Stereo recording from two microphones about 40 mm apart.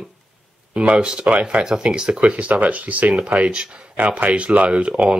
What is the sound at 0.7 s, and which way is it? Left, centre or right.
Speech, right.